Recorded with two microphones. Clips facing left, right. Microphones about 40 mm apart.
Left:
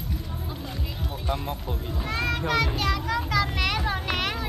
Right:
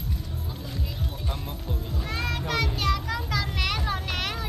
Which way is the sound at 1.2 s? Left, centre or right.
Centre.